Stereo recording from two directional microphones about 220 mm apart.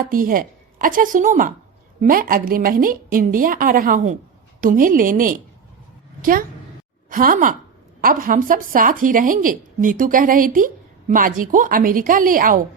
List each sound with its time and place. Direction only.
0.0 s speech: 40° right (ahead or behind)
7.1 s speech: 40° right (ahead or behind)